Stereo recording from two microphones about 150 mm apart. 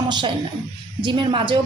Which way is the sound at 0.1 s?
30° right (ahead or behind).